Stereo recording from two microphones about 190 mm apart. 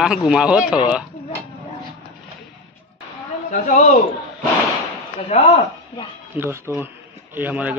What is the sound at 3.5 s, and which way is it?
Speech, 40° left (ahead or behind).